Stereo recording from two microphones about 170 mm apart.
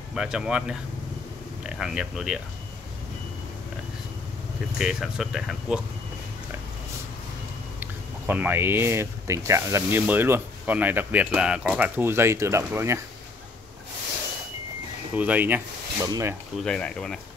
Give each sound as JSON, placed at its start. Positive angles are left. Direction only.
{"t": 0.1, "sound": "speech", "side_deg": -5}
{"t": 4.7, "sound": "speech", "side_deg": 0}
{"t": 7.8, "sound": "speech", "side_deg": -10}
{"t": 15.1, "sound": "speech", "side_deg": -10}
{"t": 16.5, "sound": "speech", "side_deg": 5}